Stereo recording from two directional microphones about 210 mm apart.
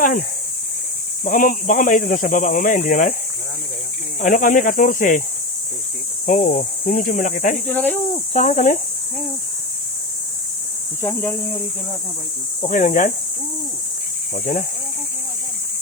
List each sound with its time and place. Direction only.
0.0 s speech: 40° left (ahead or behind)
4.2 s speech: 40° left (ahead or behind)
6.2 s speech: 40° left (ahead or behind)
11.0 s speech: 10° left (ahead or behind)
12.6 s speech: 35° left (ahead or behind)
14.3 s speech: 35° left (ahead or behind)